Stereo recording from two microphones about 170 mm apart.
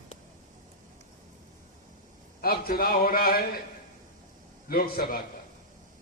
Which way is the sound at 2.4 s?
60° left (ahead or behind).